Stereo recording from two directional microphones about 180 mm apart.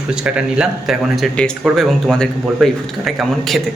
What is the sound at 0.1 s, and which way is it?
Speech, 5° right (ahead or behind).